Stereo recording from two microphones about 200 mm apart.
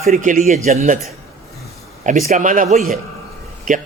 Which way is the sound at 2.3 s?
40° right (ahead or behind).